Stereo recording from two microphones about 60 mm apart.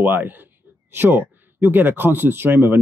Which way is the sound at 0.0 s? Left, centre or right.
Right.